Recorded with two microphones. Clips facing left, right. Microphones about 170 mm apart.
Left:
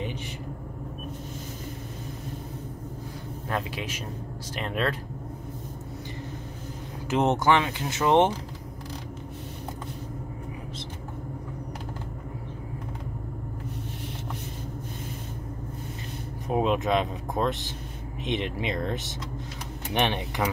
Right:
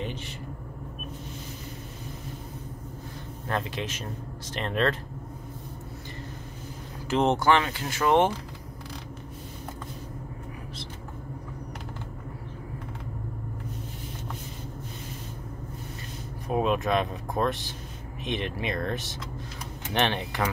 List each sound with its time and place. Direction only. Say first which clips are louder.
3.4 s speech: right 1 dB; 5° left (ahead or behind)
7.1 s speech: even; 20° left (ahead or behind)
16.4 s speech: left 1 dB; 20° left (ahead or behind)